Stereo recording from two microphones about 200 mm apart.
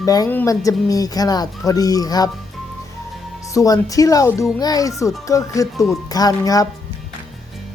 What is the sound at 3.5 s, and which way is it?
A child's voice, 15° left (ahead or behind).